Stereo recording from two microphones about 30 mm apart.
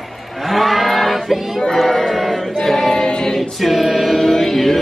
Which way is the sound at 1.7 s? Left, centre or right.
Centre.